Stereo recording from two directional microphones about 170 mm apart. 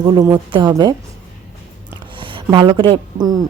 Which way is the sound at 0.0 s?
25° right (ahead or behind).